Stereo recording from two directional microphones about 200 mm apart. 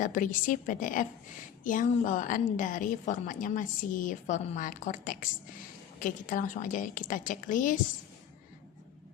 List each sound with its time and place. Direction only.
0.0 s a woman's voice: 40° left (ahead or behind)